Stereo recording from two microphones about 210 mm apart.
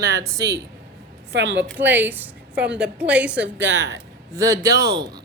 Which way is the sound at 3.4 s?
55° right (ahead or behind).